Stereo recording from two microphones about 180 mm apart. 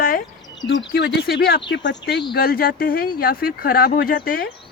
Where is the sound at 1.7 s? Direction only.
75° left (ahead or behind).